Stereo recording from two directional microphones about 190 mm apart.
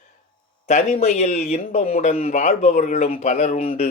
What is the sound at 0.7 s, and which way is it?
Speech, 40° left (ahead or behind).